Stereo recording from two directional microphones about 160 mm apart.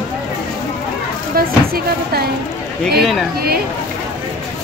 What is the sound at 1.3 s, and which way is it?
Speech, 70° right (ahead or behind).